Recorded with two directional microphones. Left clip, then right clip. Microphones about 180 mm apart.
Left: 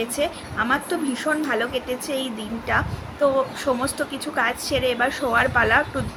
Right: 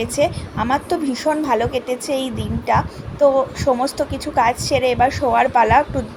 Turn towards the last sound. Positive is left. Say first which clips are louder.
# right 5 dB
turn(degrees=-15)  # may be behind; listen again after turning